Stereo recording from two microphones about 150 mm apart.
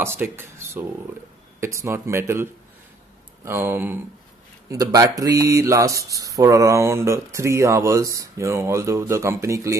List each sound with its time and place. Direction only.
0.0 s speech: 15° right (ahead or behind)